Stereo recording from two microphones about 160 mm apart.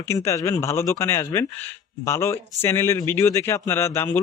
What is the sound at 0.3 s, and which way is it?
Speech, 20° left (ahead or behind).